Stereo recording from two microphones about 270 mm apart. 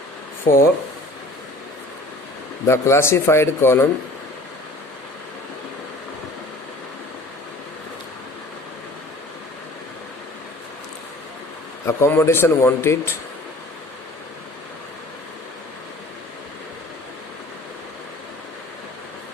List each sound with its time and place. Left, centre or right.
0.5 s speech: left
2.6 s speech: centre
11.9 s speech: centre